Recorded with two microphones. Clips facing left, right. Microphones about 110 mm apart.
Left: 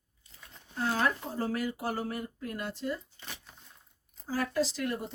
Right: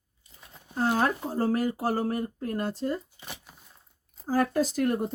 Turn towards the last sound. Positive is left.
turn(degrees=-50)  # may be behind; listen again after turning